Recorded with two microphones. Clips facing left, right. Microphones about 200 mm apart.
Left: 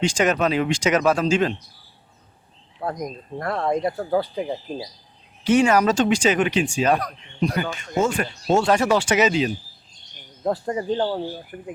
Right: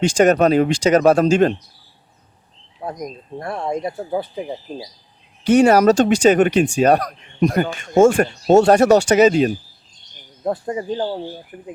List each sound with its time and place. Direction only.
0.2 s speech: 40° right (ahead or behind)
1.0 s speech: 50° right (ahead or behind)
2.9 s speech: centre (ahead or behind)
3.3 s speech: 25° right (ahead or behind)
5.5 s speech: 40° right (ahead or behind)
10.4 s speech: 15° right (ahead or behind)